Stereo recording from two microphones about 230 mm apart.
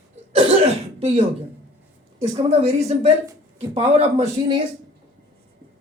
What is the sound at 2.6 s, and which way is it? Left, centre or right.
Speech, right.